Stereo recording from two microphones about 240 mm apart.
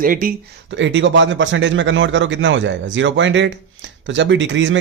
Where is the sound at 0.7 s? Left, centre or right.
Right.